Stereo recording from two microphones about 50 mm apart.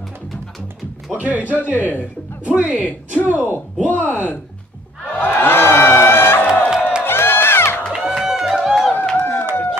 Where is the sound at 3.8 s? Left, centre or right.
Left.